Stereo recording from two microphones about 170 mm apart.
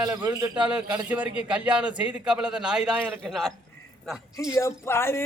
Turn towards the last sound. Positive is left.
turn(degrees=15)  # may be behind; listen again after turning